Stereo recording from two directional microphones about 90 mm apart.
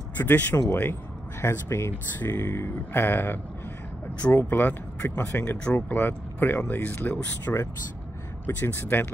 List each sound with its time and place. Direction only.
0.2 s speech: 20° left (ahead or behind)